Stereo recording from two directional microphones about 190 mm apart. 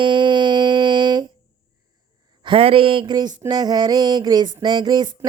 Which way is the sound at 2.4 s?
30° right (ahead or behind).